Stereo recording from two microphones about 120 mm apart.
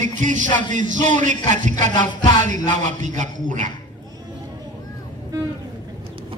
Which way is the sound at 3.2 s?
90° right.